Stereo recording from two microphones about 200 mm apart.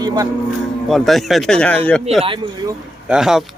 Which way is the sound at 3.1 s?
5° right (ahead or behind).